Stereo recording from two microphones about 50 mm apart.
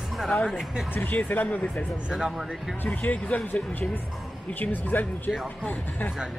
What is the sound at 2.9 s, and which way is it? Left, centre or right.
Speech, left.